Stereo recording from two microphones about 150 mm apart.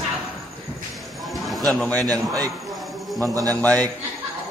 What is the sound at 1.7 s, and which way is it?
Speech, 5° left (ahead or behind).